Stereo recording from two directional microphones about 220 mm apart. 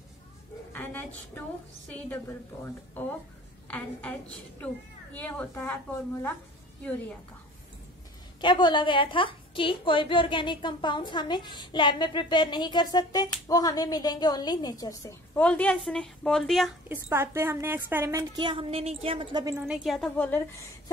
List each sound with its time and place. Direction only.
0.7 s a sound: 5° left (ahead or behind)
1.9 s a woman's voice: 10° left (ahead or behind)
5.1 s a woman's voice: 5° left (ahead or behind)
6.8 s a woman's voice: 5° left (ahead or behind)
8.4 s a woman's voice: 20° left (ahead or behind); by 16.7 s centre (ahead or behind)
16.9 s a woman's voice: 10° right (ahead or behind)
19.6 s a woman's voice: centre (ahead or behind)